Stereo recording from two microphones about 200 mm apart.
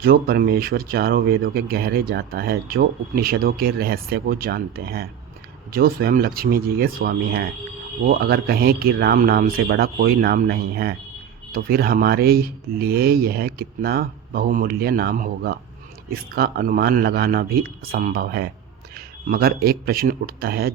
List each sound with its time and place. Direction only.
0.0 s speech: 50° right (ahead or behind)